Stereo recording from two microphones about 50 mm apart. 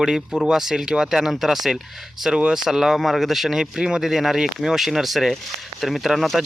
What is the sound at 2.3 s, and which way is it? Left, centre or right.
Speech, centre.